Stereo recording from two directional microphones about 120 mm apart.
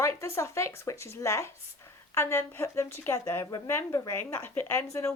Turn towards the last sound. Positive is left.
turn(degrees=20)  # may be behind; listen again after turning